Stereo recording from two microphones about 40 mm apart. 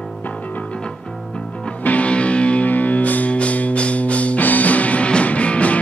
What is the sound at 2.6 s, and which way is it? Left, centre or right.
Music, left.